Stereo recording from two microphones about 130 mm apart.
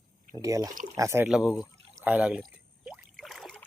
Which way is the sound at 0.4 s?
25° right (ahead or behind).